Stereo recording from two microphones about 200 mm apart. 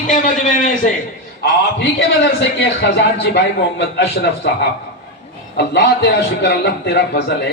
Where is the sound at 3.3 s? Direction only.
55° left (ahead or behind).